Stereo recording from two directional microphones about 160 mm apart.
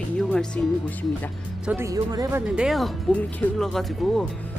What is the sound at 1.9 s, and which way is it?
Speech, 20° right (ahead or behind).